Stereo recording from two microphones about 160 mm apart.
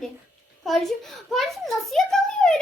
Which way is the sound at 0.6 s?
Centre (ahead or behind).